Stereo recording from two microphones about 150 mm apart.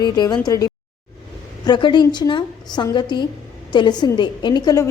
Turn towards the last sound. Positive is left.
turn(degrees=25)  # may be behind; listen again after turning